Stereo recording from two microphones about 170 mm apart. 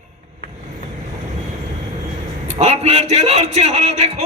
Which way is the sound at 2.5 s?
40° right (ahead or behind).